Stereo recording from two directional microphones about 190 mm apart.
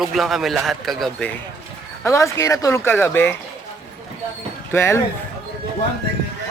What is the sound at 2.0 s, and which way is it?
Speech, 15° left (ahead or behind).